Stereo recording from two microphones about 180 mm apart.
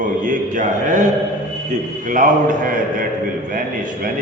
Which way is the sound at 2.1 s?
50° right (ahead or behind).